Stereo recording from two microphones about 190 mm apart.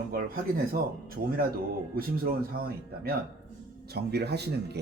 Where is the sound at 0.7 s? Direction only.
50° right (ahead or behind).